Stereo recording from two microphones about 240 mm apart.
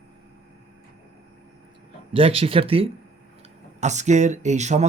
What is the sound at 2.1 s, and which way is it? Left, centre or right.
Speech, right.